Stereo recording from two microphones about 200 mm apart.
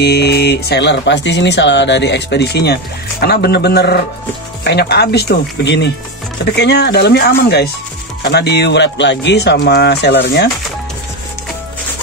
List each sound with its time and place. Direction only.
0.0 s speech: 55° left (ahead or behind)